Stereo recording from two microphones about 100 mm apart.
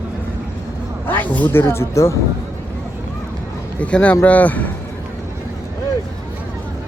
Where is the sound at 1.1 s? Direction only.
15° left (ahead or behind).